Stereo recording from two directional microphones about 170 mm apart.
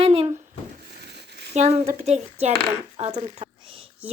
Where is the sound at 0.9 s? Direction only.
75° right (ahead or behind).